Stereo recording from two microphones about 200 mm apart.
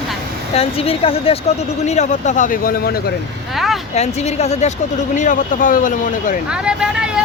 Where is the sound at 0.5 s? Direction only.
30° left (ahead or behind); by 2.9 s 45° left (ahead or behind).